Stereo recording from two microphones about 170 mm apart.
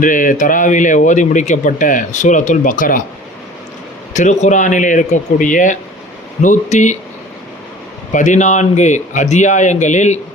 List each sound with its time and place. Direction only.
0.0 s speech: 50° left (ahead or behind)
4.1 s speech: 45° left (ahead or behind)
8.1 s speech: 45° left (ahead or behind)